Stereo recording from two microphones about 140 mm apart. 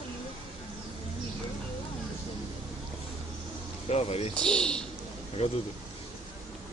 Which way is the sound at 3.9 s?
50° left (ahead or behind).